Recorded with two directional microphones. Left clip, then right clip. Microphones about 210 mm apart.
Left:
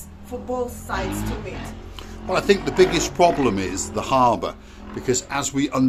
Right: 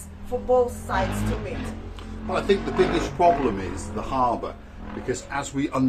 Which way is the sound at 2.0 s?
40° left (ahead or behind).